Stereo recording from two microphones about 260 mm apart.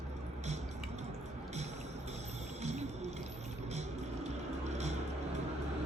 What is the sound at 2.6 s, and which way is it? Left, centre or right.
Music, right.